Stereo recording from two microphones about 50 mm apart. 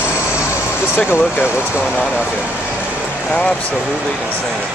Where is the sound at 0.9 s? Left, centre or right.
Left.